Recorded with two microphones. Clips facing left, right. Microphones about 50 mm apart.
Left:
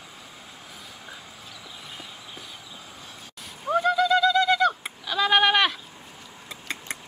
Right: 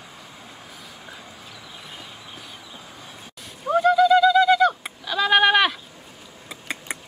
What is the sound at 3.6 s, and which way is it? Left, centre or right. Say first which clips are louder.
Bird: right 5 dB; centre.